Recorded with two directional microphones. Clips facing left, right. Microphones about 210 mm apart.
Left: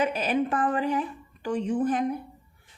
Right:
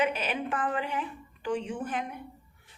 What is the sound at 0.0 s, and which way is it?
A woman's voice, 40° left (ahead or behind).